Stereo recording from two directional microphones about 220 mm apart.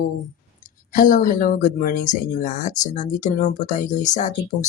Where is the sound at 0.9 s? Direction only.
35° left (ahead or behind).